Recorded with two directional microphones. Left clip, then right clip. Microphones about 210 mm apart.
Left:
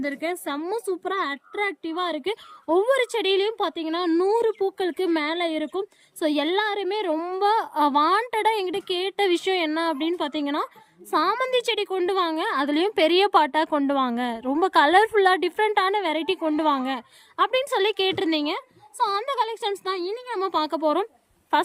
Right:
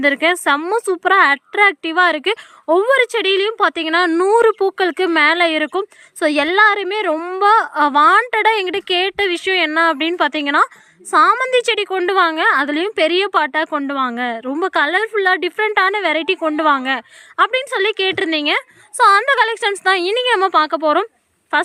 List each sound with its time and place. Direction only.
0.6 s a woman's voice: centre (ahead or behind)
2.0 s a woman's voice: centre (ahead or behind)
19.9 s a woman's voice: 30° right (ahead or behind)
20.4 s a woman's voice: 5° left (ahead or behind)